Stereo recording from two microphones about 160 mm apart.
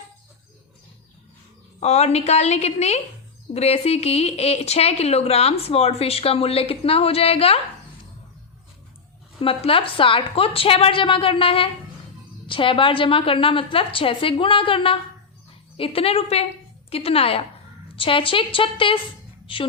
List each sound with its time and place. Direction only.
1.8 s speech: 40° left (ahead or behind)
9.4 s speech: 35° left (ahead or behind)